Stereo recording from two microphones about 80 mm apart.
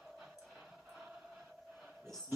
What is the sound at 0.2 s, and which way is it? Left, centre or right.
Music, centre.